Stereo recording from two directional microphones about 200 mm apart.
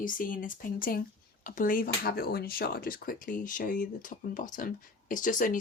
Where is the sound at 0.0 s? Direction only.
45° left (ahead or behind).